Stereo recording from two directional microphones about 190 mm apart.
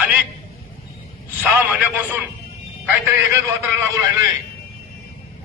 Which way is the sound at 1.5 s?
10° right (ahead or behind).